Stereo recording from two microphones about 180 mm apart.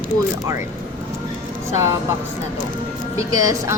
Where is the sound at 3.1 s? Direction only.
20° right (ahead or behind).